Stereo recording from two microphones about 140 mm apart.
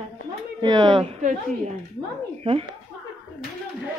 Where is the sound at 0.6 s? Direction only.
30° right (ahead or behind).